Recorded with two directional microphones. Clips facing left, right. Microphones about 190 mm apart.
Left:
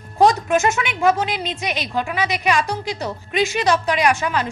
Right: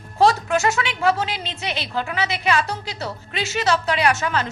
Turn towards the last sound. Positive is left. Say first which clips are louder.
# left 2 dB
turn(degrees=10)  # may be behind; listen again after turning